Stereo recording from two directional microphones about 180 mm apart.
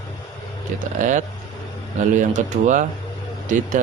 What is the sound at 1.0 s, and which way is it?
Speech, 45° right (ahead or behind).